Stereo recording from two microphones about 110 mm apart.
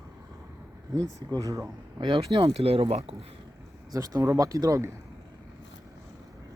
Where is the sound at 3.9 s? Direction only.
35° right (ahead or behind).